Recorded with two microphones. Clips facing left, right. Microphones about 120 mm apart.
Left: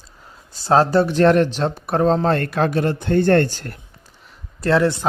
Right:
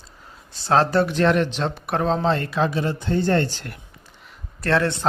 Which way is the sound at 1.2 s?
40° left (ahead or behind).